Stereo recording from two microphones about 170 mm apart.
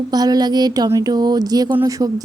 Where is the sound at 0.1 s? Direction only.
25° right (ahead or behind).